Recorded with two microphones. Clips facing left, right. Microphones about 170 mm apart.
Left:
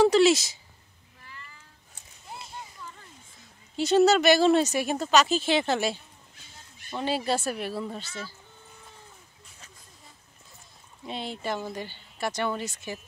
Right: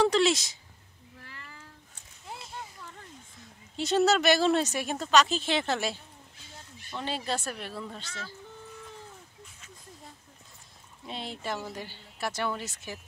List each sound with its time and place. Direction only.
0.0 s speech: 5° left (ahead or behind)
1.2 s cat: 80° right
3.7 s speech: centre (ahead or behind)
7.0 s speech: 10° left (ahead or behind)
11.1 s speech: centre (ahead or behind)